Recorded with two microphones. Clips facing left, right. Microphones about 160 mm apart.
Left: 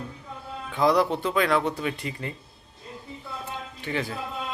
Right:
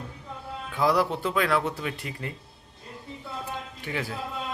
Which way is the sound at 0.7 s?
5° right (ahead or behind).